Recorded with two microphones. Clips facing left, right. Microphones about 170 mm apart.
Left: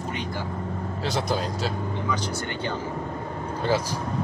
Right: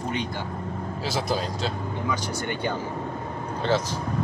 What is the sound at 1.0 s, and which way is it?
Speech, 5° right (ahead or behind).